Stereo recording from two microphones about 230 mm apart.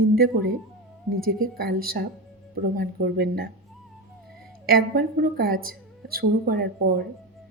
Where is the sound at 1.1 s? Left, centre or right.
Right.